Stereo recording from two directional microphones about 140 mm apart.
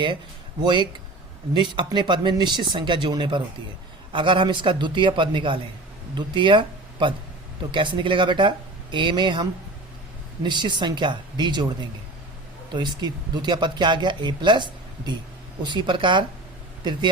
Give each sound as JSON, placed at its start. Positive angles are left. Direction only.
{"t": 0.6, "sound": "speech", "side_deg": -35}